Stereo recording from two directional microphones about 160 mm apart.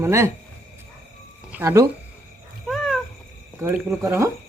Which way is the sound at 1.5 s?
15° right (ahead or behind).